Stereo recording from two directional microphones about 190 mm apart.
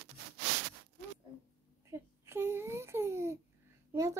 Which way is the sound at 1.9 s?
15° right (ahead or behind).